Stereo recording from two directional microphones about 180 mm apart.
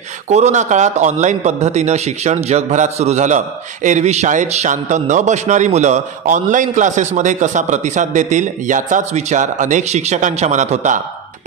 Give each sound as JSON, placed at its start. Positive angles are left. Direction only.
{"t": 0.3, "sound": "a man's voice", "side_deg": -40}